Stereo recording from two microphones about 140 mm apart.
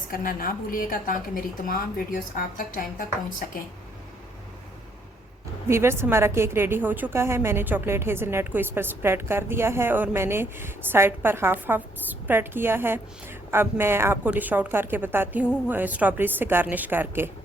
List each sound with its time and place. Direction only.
0.1 s a woman's voice: 90° left
5.6 s a woman's voice: 15° right (ahead or behind)